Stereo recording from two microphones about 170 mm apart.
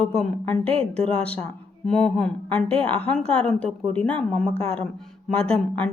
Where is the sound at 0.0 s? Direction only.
5° left (ahead or behind).